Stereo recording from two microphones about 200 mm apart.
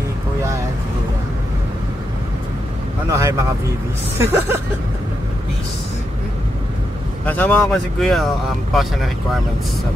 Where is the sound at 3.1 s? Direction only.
15° right (ahead or behind).